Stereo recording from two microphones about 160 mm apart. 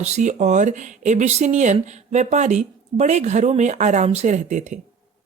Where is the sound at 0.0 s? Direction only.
45° right (ahead or behind).